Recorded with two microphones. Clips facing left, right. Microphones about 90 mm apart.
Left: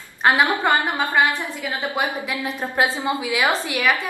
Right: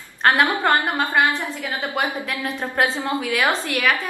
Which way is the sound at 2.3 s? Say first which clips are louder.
Even; 15° left (ahead or behind).